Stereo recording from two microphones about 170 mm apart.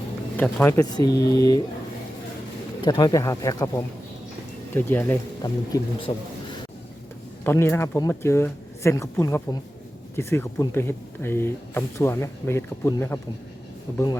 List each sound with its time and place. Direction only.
0.3 s speech: 10° left (ahead or behind)
2.8 s speech: 25° left (ahead or behind)
5.4 s speech: 25° left (ahead or behind)
7.4 s speech: 15° left (ahead or behind)